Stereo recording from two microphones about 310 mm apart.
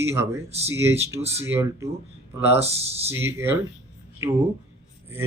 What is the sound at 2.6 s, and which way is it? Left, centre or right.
Speech, centre.